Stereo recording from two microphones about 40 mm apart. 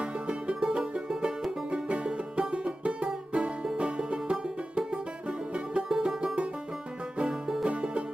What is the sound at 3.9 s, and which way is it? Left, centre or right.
Music, right.